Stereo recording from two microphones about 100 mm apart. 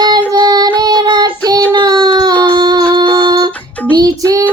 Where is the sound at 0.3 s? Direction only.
45° right (ahead or behind).